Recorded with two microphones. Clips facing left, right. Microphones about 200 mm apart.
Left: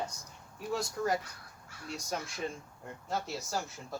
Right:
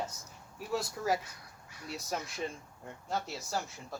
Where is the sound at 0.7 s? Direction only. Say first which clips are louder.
Even; 5° right (ahead or behind).